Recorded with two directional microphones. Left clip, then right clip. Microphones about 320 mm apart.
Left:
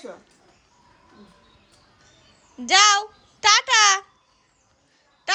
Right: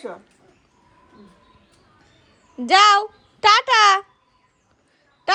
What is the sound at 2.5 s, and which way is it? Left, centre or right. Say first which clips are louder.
Babbling: right 3 dB; centre.